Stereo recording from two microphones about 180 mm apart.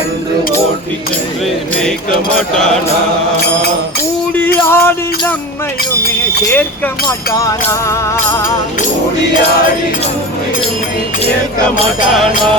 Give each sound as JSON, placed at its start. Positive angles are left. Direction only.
{"t": 4.4, "sound": "speech", "side_deg": 10}
{"t": 7.3, "sound": "speech", "side_deg": 20}